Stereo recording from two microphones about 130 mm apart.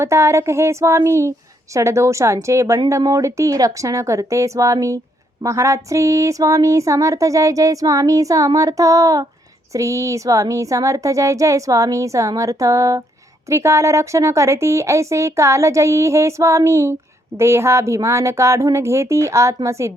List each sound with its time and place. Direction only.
0.0 s speech: 20° right (ahead or behind)